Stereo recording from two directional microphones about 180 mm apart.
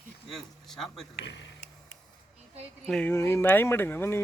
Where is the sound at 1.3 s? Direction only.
85° left.